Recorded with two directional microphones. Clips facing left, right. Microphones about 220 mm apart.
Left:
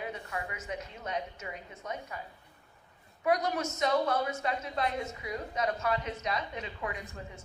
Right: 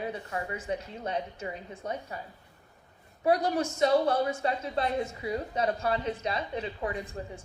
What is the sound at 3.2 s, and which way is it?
A woman's voice, 30° right (ahead or behind).